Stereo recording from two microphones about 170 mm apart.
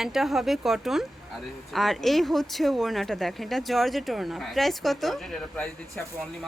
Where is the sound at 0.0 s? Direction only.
Centre (ahead or behind).